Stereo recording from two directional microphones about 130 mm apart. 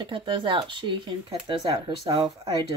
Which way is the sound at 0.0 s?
40° right (ahead or behind).